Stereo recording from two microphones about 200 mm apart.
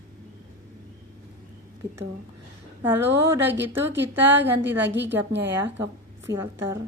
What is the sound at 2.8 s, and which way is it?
A woman's voice, 10° right (ahead or behind).